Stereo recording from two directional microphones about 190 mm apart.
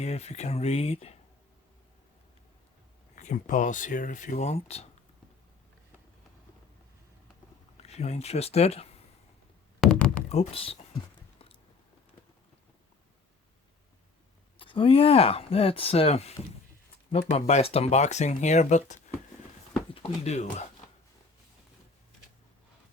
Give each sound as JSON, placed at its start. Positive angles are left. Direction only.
{"t": 0.0, "sound": "speech", "side_deg": 35}
{"t": 3.2, "sound": "speech", "side_deg": 40}
{"t": 7.8, "sound": "speech", "side_deg": 35}
{"t": 9.8, "sound": "a sound", "side_deg": 5}
{"t": 10.2, "sound": "speech", "side_deg": 30}
{"t": 14.6, "sound": "speech", "side_deg": 30}